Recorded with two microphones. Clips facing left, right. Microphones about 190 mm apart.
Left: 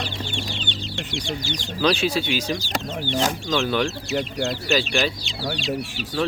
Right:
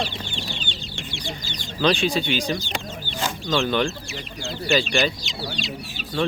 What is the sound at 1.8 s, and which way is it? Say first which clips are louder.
Speech: even; 5° left (ahead or behind).